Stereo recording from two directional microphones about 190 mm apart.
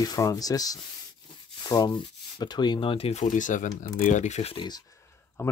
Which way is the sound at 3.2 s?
40° left (ahead or behind).